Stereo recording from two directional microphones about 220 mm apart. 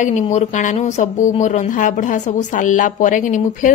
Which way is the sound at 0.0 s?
30° left (ahead or behind).